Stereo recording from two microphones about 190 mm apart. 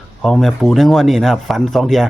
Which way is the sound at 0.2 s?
Centre (ahead or behind).